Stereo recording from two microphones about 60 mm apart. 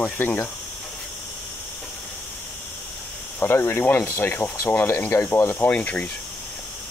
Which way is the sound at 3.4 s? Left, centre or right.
Left.